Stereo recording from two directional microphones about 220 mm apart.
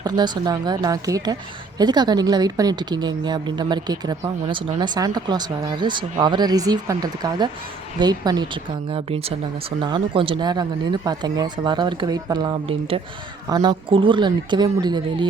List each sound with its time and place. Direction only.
0.0 s a woman's voice: 20° right (ahead or behind)